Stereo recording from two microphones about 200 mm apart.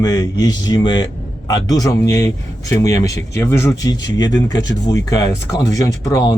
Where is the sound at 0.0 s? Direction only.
20° left (ahead or behind).